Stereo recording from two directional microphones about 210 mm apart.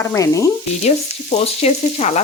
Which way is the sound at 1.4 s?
30° left (ahead or behind).